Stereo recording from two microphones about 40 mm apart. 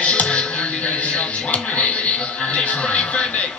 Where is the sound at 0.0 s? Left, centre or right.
Left.